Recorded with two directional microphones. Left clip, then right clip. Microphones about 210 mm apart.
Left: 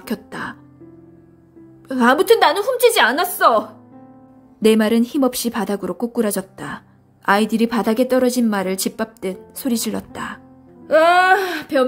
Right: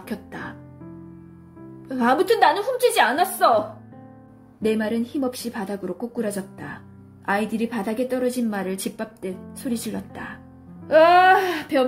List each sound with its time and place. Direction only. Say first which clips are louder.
0.0 s music: left 6 dB; 25° left (ahead or behind)
1.9 s a woman's voice: left 6 dB; 25° left (ahead or behind)
10.9 s a sound: left 1 dB; 15° left (ahead or behind)